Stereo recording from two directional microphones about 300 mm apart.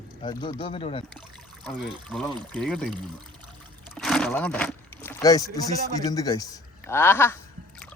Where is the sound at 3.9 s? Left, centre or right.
Centre.